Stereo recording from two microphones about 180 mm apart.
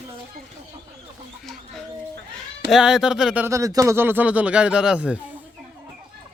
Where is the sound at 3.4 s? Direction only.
20° right (ahead or behind).